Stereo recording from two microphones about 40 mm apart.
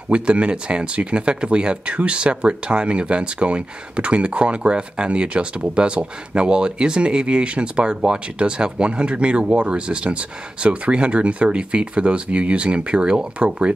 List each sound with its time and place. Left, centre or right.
0.1 s speech: right